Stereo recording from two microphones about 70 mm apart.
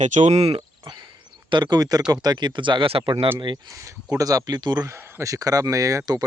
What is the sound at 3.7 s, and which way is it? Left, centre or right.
Speech, right.